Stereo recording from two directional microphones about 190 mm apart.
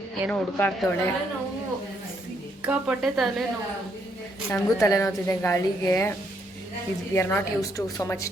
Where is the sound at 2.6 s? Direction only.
5° right (ahead or behind).